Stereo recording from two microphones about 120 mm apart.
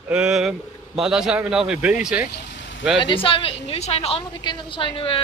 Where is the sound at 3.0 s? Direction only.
45° left (ahead or behind).